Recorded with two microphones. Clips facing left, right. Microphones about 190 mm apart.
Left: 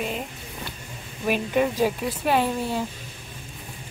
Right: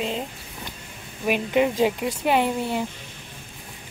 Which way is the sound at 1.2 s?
15° right (ahead or behind).